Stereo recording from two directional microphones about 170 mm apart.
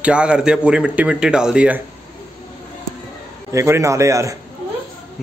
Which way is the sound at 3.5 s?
15° right (ahead or behind).